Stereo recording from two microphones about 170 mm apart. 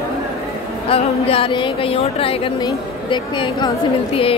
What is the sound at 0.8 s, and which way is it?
Speech, 35° left (ahead or behind).